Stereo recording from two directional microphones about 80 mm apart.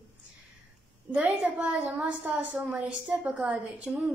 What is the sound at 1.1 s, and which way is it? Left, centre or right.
A woman's voice, centre.